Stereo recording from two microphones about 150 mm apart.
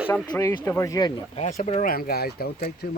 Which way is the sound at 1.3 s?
45° left (ahead or behind).